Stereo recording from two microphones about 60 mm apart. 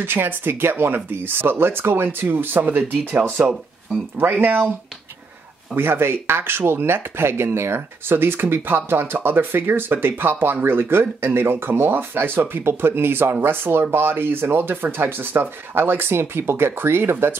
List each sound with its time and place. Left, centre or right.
0.0 s speech: right
5.8 s speech: right